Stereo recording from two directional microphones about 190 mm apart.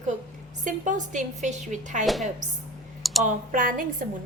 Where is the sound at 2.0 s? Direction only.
Centre (ahead or behind).